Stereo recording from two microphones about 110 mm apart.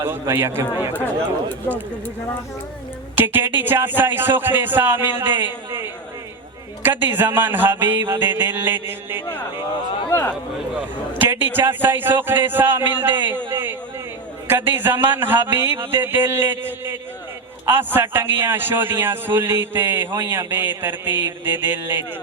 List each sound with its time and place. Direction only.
0.0 s a man's voice: 20° right (ahead or behind)
3.2 s a man's voice: 20° right (ahead or behind)
10.1 s speech: 20° left (ahead or behind)
11.1 s a man's voice: 20° right (ahead or behind)